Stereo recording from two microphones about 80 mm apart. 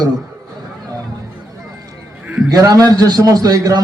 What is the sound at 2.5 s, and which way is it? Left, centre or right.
A man's voice, right.